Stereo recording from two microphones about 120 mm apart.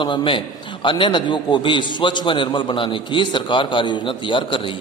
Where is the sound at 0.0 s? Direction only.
45° left (ahead or behind).